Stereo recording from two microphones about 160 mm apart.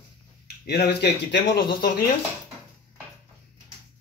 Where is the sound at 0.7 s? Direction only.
90° left.